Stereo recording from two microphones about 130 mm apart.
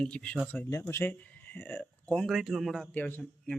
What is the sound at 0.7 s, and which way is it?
Speech, 20° left (ahead or behind).